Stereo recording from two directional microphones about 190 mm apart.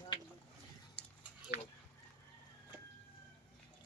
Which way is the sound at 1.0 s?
5° left (ahead or behind).